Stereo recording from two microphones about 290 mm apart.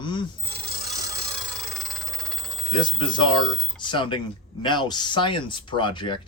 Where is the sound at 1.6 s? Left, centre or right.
Centre.